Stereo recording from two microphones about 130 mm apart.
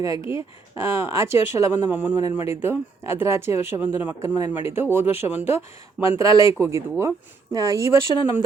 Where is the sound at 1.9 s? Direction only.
10° right (ahead or behind).